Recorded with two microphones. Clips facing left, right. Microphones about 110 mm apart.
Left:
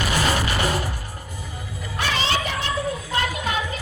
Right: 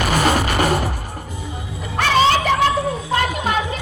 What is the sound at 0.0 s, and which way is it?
Music, 50° right (ahead or behind).